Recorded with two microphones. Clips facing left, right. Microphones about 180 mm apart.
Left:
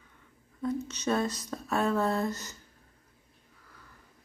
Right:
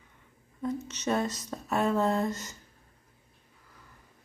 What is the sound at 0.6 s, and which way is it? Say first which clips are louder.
Speech: left 1 dB; 15° right (ahead or behind).